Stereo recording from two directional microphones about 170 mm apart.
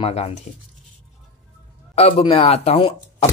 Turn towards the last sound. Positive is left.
turn(degrees=35)  # may be behind; listen again after turning